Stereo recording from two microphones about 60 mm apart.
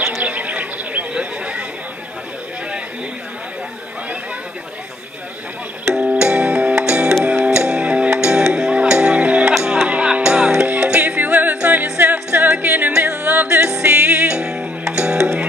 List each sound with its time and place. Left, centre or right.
0.2 s a sound: right
5.9 s music: centre
10.7 s music: right
13.7 s music: centre
13.9 s music: right
14.3 s music: centre